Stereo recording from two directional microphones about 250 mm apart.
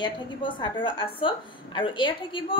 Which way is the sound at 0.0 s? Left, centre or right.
Centre.